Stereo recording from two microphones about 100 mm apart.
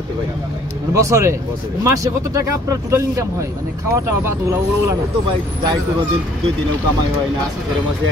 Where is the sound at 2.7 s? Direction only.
35° right (ahead or behind).